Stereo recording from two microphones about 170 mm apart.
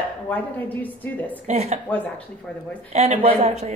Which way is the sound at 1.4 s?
40° right (ahead or behind).